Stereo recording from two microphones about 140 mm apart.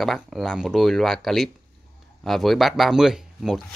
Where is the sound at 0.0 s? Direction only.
Centre (ahead or behind).